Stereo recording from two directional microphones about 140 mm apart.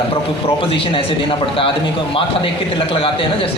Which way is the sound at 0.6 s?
40° left (ahead or behind).